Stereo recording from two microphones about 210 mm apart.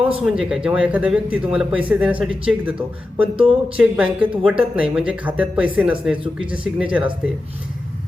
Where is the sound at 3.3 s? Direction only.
25° right (ahead or behind).